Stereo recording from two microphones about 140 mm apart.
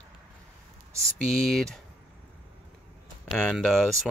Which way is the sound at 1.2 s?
5° left (ahead or behind).